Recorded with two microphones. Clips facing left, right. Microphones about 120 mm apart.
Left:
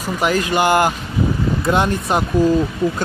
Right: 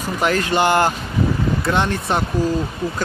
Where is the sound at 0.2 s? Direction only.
10° left (ahead or behind).